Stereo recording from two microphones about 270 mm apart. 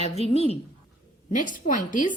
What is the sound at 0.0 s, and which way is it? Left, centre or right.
A woman's voice, left.